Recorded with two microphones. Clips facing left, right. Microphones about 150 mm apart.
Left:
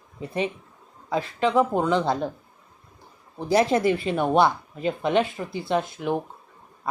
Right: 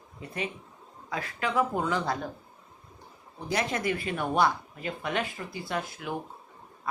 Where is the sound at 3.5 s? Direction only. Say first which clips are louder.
Left 9 dB; 30° left (ahead or behind).